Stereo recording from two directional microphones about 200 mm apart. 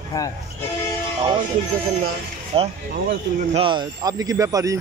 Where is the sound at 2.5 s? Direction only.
30° right (ahead or behind).